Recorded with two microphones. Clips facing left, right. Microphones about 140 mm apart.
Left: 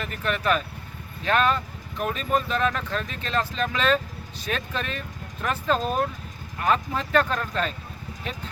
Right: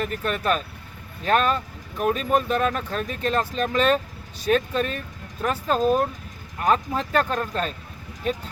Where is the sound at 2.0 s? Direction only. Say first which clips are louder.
Right 4 dB; 40° right (ahead or behind).